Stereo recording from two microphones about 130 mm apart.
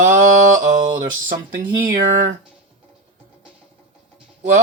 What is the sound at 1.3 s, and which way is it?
Speech, 90° right.